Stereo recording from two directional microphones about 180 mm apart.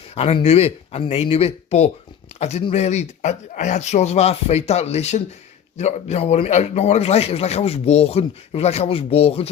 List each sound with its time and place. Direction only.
0.1 s a man's voice: 35° left (ahead or behind)